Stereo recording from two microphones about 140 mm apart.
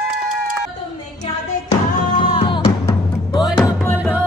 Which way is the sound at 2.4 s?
35° left (ahead or behind).